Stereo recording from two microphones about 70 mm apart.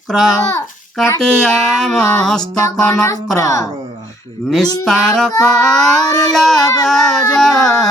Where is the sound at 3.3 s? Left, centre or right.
Left.